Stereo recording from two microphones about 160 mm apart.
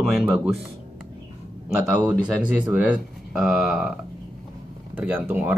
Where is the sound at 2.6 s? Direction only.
10° right (ahead or behind).